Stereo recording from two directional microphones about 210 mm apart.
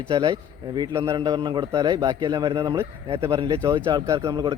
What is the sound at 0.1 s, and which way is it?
A man's voice, 20° right (ahead or behind).